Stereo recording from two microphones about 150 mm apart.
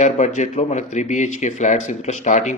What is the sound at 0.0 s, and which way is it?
A man's voice, 55° left (ahead or behind).